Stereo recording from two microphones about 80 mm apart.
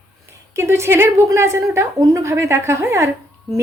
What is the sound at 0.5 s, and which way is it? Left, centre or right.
A woman's voice, right.